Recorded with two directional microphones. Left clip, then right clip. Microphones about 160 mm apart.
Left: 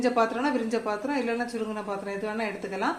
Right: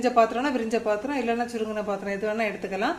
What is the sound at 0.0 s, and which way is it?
Speech, 30° right (ahead or behind).